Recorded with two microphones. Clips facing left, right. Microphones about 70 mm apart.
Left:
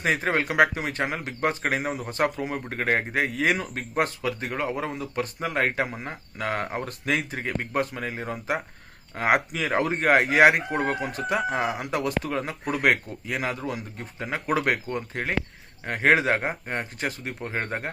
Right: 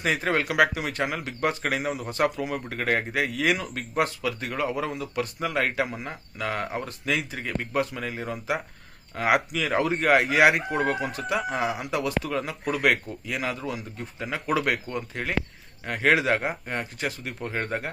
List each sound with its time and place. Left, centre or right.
0.0 s speech: left